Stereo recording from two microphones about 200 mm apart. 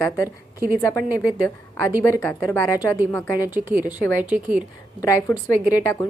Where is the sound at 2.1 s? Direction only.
10° left (ahead or behind).